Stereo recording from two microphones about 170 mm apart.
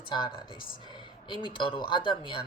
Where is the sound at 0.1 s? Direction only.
25° left (ahead or behind).